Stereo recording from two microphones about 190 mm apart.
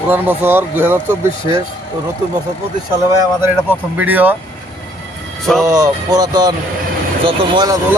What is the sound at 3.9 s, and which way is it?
Speech, 10° right (ahead or behind).